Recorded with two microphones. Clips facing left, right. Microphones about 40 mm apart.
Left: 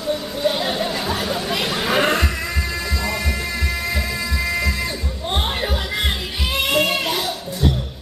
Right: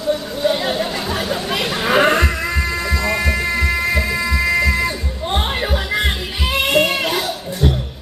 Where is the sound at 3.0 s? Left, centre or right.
Right.